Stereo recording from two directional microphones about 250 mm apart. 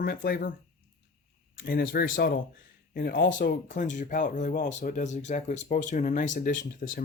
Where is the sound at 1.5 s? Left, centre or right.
Left.